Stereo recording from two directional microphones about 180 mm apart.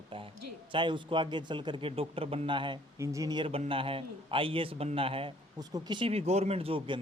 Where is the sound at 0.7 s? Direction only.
25° right (ahead or behind).